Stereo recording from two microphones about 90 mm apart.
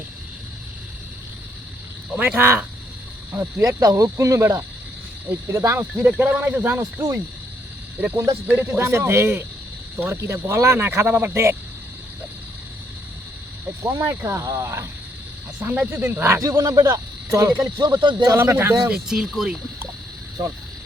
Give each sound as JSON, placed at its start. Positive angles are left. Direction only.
{"t": 2.1, "sound": "a man's voice", "side_deg": -15}
{"t": 2.4, "sound": "speech", "side_deg": -25}
{"t": 6.0, "sound": "a man's voice", "side_deg": -15}
{"t": 8.1, "sound": "speech", "side_deg": -35}
{"t": 8.4, "sound": "speech", "side_deg": -20}
{"t": 14.2, "sound": "speech", "side_deg": -30}
{"t": 15.9, "sound": "speech", "side_deg": -25}
{"t": 16.4, "sound": "speech", "side_deg": -40}
{"t": 17.7, "sound": "speech", "side_deg": -50}
{"t": 18.3, "sound": "speech", "side_deg": -30}
{"t": 18.9, "sound": "a man's voice", "side_deg": -10}
{"t": 20.4, "sound": "speech", "side_deg": -50}